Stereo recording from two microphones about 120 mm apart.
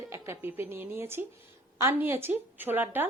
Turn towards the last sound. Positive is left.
turn(degrees=-15)  # may be behind; listen again after turning